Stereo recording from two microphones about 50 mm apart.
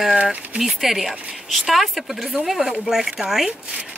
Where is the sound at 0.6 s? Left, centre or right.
Centre.